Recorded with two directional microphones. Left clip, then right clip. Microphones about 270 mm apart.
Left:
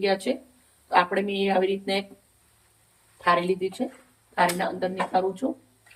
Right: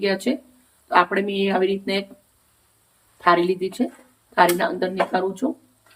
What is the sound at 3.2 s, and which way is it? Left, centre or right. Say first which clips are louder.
Speech: right 4 dB; centre.